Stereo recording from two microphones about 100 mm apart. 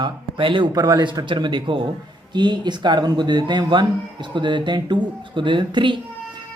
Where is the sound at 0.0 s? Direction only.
55° right (ahead or behind).